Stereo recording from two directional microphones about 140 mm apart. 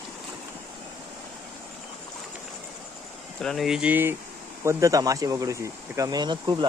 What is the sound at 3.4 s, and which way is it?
Speech, centre (ahead or behind).